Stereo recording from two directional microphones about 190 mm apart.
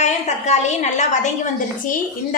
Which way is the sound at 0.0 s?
35° left (ahead or behind).